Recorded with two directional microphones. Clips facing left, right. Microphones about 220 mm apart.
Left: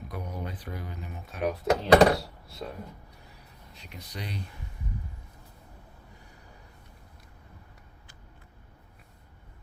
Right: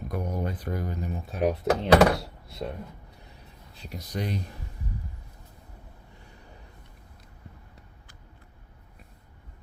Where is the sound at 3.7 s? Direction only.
35° right (ahead or behind).